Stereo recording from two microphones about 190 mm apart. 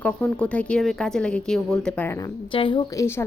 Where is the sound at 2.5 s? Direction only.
25° left (ahead or behind).